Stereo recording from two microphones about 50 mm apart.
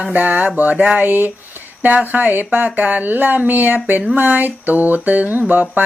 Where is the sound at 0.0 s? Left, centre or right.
Right.